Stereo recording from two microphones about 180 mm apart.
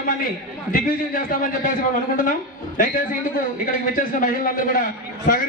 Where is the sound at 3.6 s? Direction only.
50° left (ahead or behind).